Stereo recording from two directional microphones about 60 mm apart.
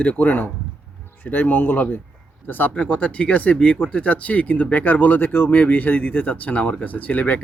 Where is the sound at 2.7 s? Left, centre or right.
Centre.